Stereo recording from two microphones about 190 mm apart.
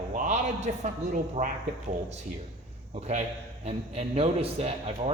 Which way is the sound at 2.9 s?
35° right (ahead or behind).